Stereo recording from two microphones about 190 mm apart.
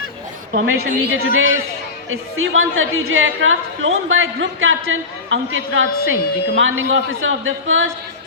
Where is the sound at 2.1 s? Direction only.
90° right.